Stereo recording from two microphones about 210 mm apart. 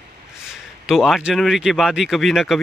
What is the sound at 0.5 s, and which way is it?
A man's voice, centre (ahead or behind).